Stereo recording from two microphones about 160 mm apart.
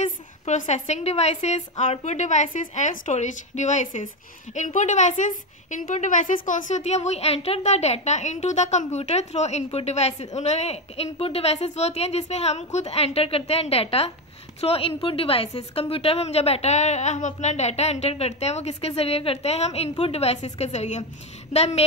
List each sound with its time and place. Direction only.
0.0 s a woman's voice: 50° left (ahead or behind)